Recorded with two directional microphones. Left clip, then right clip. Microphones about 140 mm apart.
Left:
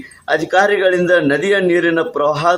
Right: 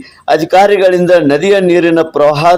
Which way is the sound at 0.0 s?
35° right (ahead or behind).